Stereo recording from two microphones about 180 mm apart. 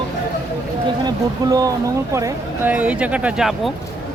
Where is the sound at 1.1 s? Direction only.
20° right (ahead or behind).